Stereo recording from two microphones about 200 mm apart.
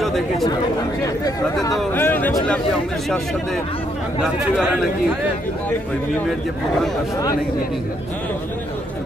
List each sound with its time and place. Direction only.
0.0 s speech: centre (ahead or behind)
1.0 s speech: 20° left (ahead or behind)